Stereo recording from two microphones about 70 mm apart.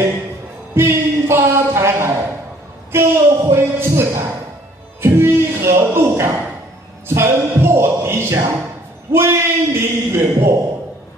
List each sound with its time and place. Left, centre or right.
0.7 s a sound: right
2.9 s speech: right
5.0 s music: right
9.1 s speech: right